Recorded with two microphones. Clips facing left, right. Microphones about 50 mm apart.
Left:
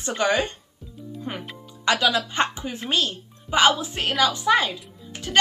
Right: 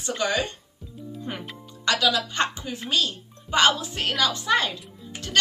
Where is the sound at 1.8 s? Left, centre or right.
Left.